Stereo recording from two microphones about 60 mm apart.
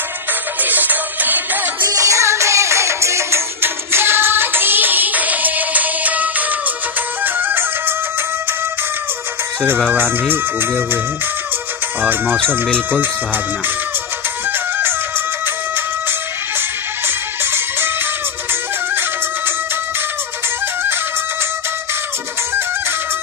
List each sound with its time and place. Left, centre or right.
0.3 s music: right
1.9 s music: right
9.9 s speech: right
12.0 s speech: right
15.4 s music: right
20.8 s music: right